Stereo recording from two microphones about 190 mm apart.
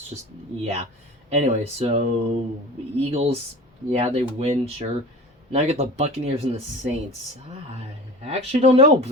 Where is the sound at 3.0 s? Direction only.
35° right (ahead or behind).